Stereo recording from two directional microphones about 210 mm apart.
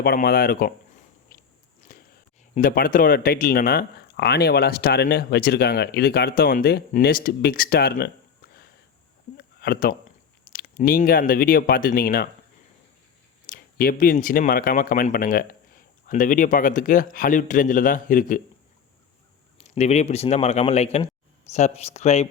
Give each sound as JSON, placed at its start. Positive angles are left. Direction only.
{"t": 0.0, "sound": "speech", "side_deg": 50}
{"t": 1.3, "sound": "biting", "side_deg": 40}
{"t": 1.8, "sound": "a sound", "side_deg": 40}
{"t": 2.6, "sound": "speech", "side_deg": 40}
{"t": 9.4, "sound": "a sound", "side_deg": 45}
{"t": 10.5, "sound": "speech", "side_deg": 45}
{"t": 13.5, "sound": "speech", "side_deg": 45}
{"t": 19.5, "sound": "speech", "side_deg": 30}